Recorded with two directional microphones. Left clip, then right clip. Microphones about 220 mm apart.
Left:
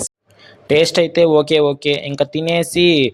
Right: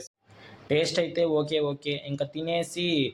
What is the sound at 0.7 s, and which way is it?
Speech, 40° left (ahead or behind).